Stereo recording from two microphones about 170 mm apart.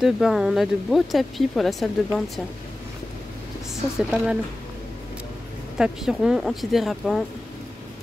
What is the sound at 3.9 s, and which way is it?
Speech, 5° right (ahead or behind).